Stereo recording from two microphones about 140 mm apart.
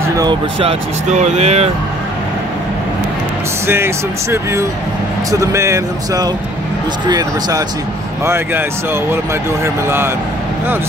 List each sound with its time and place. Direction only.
0.2 s speech: 40° right (ahead or behind)
3.6 s speech: 15° right (ahead or behind)
9.8 s speech: 15° right (ahead or behind)